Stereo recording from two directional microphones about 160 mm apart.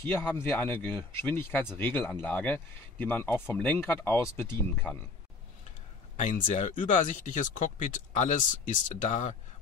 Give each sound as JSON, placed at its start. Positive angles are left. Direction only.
{"t": 0.1, "sound": "speech", "side_deg": 10}
{"t": 6.1, "sound": "speech", "side_deg": 50}